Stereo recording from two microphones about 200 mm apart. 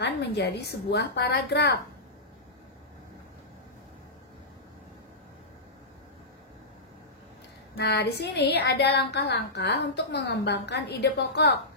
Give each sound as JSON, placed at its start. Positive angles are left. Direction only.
{"t": 0.0, "sound": "a woman's voice", "side_deg": 55}
{"t": 7.7, "sound": "a woman's voice", "side_deg": 55}